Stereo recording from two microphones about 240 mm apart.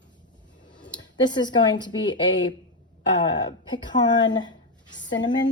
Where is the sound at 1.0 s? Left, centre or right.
Centre.